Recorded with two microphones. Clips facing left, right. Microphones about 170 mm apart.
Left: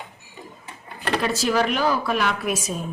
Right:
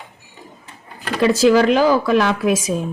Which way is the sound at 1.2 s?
90° right.